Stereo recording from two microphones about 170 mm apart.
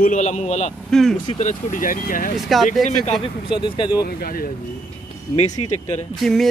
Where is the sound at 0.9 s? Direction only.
5° left (ahead or behind).